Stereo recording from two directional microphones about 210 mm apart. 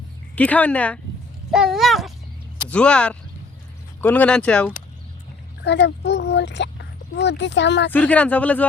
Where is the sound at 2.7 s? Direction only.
5° left (ahead or behind).